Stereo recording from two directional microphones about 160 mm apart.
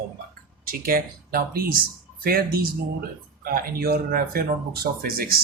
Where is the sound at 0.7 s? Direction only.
65° right (ahead or behind).